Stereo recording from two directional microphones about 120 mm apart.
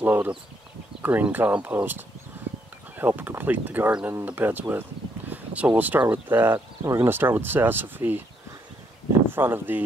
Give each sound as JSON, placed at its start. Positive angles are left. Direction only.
{"t": 0.0, "sound": "speech", "side_deg": -15}
{"t": 9.3, "sound": "speech", "side_deg": -15}